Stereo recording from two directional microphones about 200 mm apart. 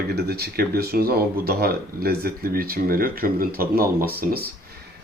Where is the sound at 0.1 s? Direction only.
50° right (ahead or behind).